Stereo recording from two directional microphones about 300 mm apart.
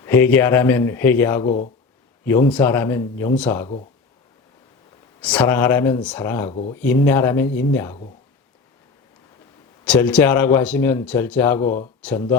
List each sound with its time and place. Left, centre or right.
0.0 s speech: centre
5.2 s speech: centre
6.5 s speech: left
6.7 s speech: centre
9.8 s speech: centre
11.6 s speech: left